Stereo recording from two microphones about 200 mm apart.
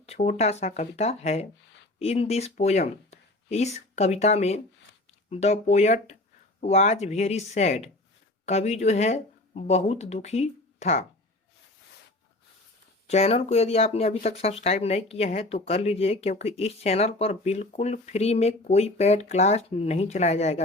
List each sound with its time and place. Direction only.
0.0 s speech: 35° left (ahead or behind)
13.1 s speech: 35° left (ahead or behind)